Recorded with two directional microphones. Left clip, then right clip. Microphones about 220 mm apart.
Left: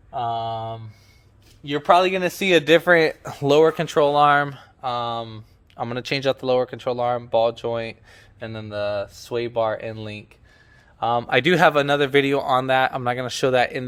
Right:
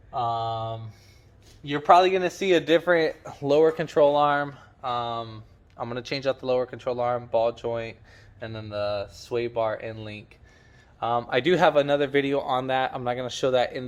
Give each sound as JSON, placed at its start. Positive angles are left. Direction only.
{"t": 0.1, "sound": "mantra", "side_deg": 20}
{"t": 1.6, "sound": "speech", "side_deg": 35}